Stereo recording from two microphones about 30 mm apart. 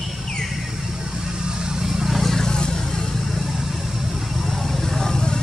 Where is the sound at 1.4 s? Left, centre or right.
Right.